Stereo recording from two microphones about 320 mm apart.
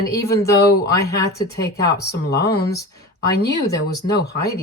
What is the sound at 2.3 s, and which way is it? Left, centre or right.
Speech, left.